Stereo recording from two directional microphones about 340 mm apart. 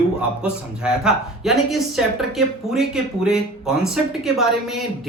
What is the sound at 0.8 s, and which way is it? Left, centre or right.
Speech, centre.